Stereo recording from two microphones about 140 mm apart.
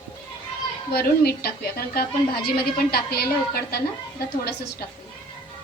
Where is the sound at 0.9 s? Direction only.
90° left.